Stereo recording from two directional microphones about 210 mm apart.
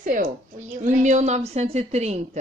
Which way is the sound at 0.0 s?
40° right (ahead or behind).